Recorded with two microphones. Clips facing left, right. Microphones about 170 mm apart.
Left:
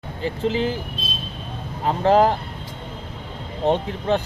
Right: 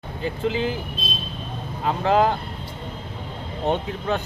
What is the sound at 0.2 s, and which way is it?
Speech, 35° left (ahead or behind).